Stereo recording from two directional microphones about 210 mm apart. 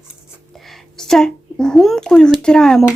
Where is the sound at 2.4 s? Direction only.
5° left (ahead or behind).